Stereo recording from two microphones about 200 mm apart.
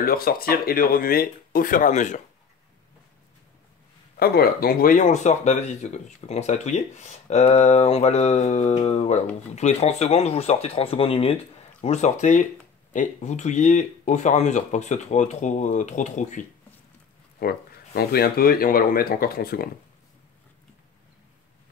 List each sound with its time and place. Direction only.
0.0 s speech: 45° left (ahead or behind)
4.2 s speech: 50° left (ahead or behind)
17.4 s speech: 50° left (ahead or behind)